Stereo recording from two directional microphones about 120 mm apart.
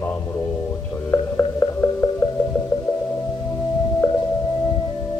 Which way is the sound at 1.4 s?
20° left (ahead or behind).